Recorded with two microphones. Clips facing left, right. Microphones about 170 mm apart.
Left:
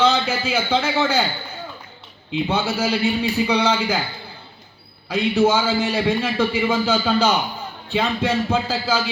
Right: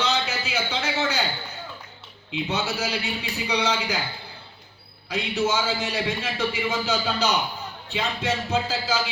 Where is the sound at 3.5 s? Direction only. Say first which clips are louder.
Left 1 dB; 55° left (ahead or behind).